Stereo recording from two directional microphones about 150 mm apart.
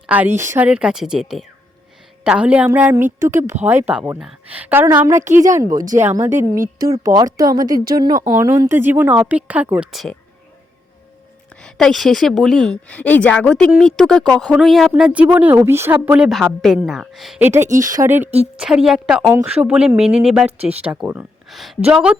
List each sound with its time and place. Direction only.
0.3 s a woman's voice: 15° right (ahead or behind)
5.6 s speech: 65° right (ahead or behind)
6.0 s a woman's voice: 15° right (ahead or behind); by 10.2 s centre (ahead or behind)
11.6 s speech: centre (ahead or behind)
17.7 s a woman's voice: 20° right (ahead or behind)
18.5 s speech: 5° right (ahead or behind)
21.5 s speech: centre (ahead or behind)